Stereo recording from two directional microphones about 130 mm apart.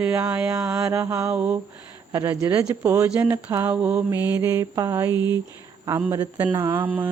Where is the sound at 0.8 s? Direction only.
20° right (ahead or behind).